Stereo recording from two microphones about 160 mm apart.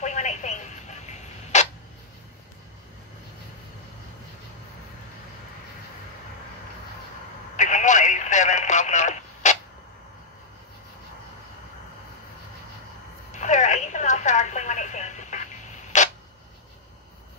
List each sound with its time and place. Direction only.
0.0 s a sound: 45° left (ahead or behind)
7.5 s telephone: 50° left (ahead or behind)
13.3 s telephone: 50° left (ahead or behind)